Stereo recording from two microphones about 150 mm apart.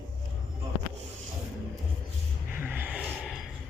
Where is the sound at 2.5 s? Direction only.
10° right (ahead or behind).